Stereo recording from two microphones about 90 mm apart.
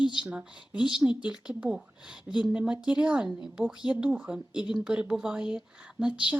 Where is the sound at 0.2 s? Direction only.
10° right (ahead or behind).